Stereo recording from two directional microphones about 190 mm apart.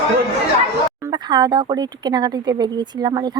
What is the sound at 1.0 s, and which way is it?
A woman's voice, 25° right (ahead or behind).